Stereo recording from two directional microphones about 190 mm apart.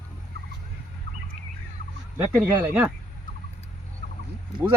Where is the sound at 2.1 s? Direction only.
15° right (ahead or behind).